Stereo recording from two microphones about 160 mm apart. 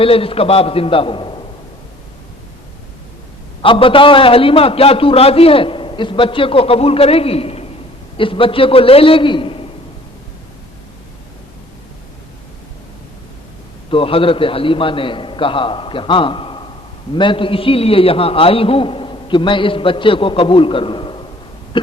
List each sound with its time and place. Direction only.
0.0 s a man's voice: 35° left (ahead or behind)
3.6 s a man's voice: 35° left (ahead or behind)
13.9 s a man's voice: 35° left (ahead or behind)